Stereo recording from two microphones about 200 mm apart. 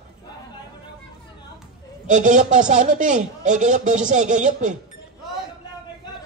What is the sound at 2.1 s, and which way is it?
A man's voice, 40° right (ahead or behind).